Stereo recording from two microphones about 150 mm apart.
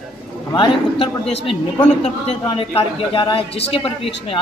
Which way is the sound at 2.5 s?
35° left (ahead or behind).